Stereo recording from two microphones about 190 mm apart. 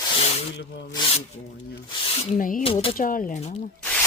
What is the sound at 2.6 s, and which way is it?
Speech, 30° left (ahead or behind).